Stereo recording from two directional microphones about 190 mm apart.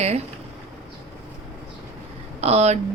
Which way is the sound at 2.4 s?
35° right (ahead or behind).